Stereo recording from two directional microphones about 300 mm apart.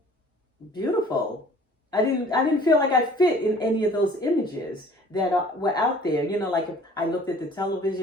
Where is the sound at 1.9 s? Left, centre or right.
Centre.